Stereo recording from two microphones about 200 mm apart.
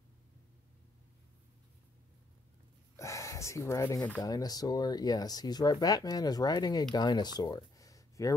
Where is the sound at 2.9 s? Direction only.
15° left (ahead or behind).